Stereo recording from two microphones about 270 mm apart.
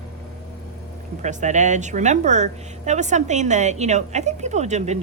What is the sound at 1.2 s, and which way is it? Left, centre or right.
A woman's voice, right.